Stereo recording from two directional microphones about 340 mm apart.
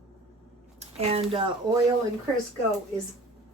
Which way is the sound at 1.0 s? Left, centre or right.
Centre.